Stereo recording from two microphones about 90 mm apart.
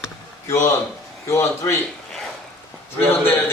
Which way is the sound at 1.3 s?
30° left (ahead or behind).